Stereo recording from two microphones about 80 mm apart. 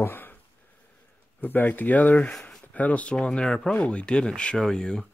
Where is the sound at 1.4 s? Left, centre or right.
Left.